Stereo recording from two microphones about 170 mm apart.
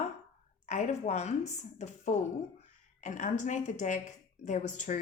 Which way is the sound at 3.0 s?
45° left (ahead or behind).